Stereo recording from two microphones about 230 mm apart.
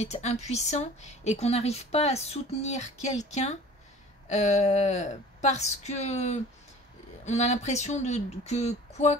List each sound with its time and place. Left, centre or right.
0.0 s speech: left